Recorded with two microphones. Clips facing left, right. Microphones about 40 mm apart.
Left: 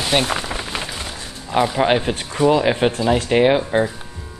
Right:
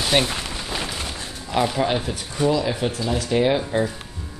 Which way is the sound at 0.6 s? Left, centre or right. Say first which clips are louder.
Left 2 dB; left.